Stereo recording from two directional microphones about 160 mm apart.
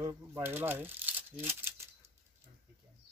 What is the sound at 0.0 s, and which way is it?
Speech, 15° right (ahead or behind).